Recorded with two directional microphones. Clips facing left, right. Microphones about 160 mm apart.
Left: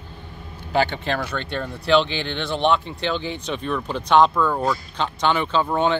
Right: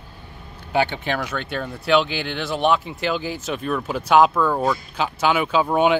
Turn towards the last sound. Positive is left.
turn(degrees=-10)  # may be behind; listen again after turning